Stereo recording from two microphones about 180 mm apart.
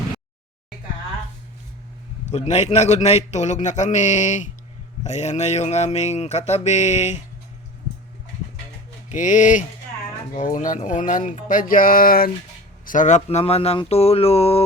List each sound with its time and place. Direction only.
2.2 s a man's voice: 40° left (ahead or behind)
9.0 s a man's voice: 45° left (ahead or behind)